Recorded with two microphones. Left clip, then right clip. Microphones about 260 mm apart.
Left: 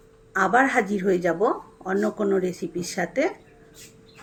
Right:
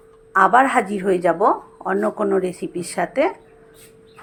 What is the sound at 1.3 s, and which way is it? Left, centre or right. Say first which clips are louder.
Speech: right 6 dB; centre.